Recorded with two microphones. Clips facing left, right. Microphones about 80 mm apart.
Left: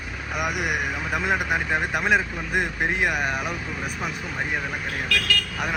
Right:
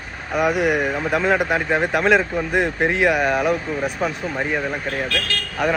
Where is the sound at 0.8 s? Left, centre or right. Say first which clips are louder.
Right 6 dB; right.